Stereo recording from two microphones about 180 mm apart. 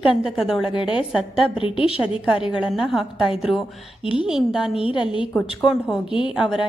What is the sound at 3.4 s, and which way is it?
A woman's voice, centre (ahead or behind).